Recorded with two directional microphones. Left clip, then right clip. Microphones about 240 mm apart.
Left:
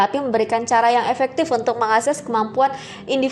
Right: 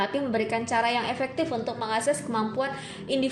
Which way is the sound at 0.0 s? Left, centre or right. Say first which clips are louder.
Left 9 dB; left.